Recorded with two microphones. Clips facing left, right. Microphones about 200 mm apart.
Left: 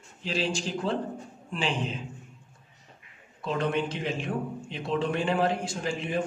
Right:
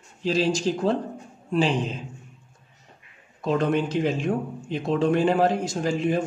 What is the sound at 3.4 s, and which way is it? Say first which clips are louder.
A man's voice: right 5 dB; 45° right (ahead or behind).